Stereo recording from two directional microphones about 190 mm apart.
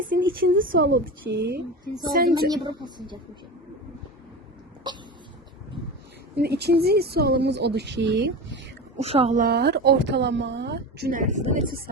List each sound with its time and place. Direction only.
0.1 s a sound: 55° right (ahead or behind)
0.5 s speech: 50° right (ahead or behind)
0.9 s speech: 65° right (ahead or behind)
2.5 s a woman's voice: 25° right (ahead or behind)
6.3 s speech: 60° right (ahead or behind)
9.0 s speech: 30° right (ahead or behind)
9.4 s speech: 55° right (ahead or behind); by 11.8 s 40° right (ahead or behind)